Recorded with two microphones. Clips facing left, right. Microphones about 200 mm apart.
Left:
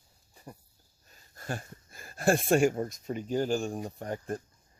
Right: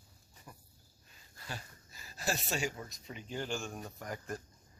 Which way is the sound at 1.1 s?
50° left (ahead or behind).